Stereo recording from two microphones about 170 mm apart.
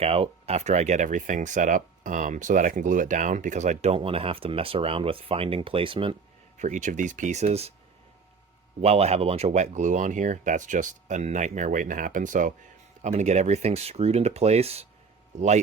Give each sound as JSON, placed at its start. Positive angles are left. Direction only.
{"t": 0.0, "sound": "speech", "side_deg": -35}
{"t": 6.6, "sound": "speech", "side_deg": -45}
{"t": 8.8, "sound": "speech", "side_deg": -40}